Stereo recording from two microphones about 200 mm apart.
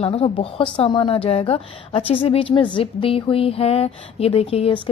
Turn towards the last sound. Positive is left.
turn(degrees=25)  # may be behind; listen again after turning